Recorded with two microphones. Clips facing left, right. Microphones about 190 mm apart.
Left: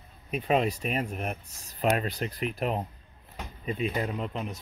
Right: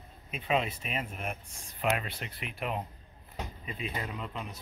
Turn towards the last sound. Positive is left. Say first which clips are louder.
# left 7 dB
turn(degrees=45)  # may be behind; listen again after turning